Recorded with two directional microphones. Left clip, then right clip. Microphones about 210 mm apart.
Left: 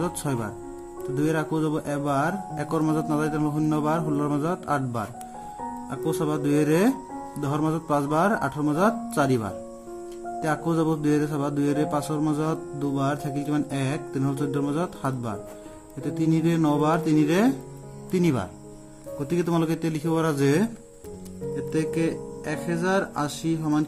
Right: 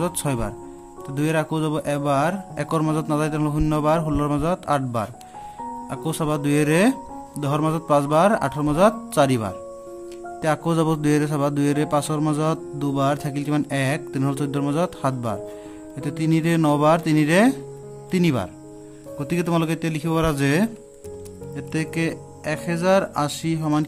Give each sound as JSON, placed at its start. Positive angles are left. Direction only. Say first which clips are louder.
{"t": 0.0, "sound": "a man's voice", "louder": "right 3 dB", "side_deg": -40}